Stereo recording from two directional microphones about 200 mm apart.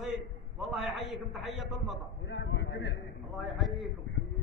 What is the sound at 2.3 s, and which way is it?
Speech, 60° left (ahead or behind).